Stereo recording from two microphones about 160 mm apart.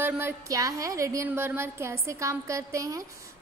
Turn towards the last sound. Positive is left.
turn(degrees=-20)  # may be behind; listen again after turning